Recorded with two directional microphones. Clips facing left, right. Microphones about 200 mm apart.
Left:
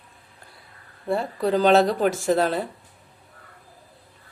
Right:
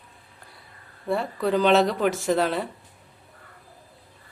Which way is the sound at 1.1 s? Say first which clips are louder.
Left 1 dB; 35° left (ahead or behind).